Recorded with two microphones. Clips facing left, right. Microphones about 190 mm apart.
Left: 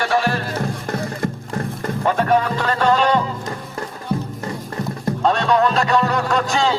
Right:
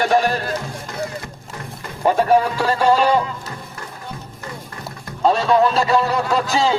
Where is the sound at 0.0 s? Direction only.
15° right (ahead or behind).